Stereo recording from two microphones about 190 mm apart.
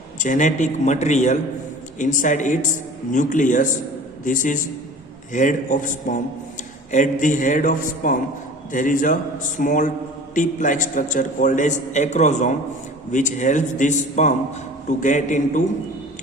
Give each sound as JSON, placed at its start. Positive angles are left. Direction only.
{"t": 0.2, "sound": "a man's voice", "side_deg": 40}